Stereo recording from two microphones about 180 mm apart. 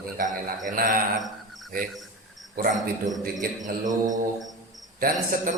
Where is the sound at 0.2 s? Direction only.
45° right (ahead or behind).